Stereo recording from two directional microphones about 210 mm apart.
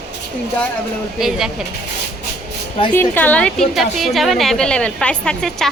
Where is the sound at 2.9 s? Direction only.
10° left (ahead or behind).